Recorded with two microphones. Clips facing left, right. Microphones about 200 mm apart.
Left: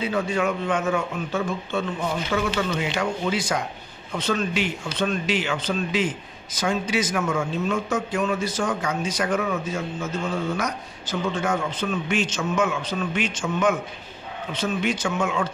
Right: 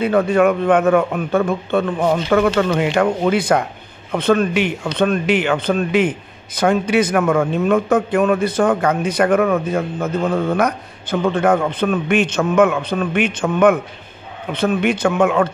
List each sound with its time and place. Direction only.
0.0 s speech: 60° right (ahead or behind)